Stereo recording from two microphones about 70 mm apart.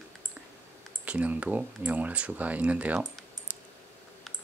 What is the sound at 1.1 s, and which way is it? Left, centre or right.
Speech, centre.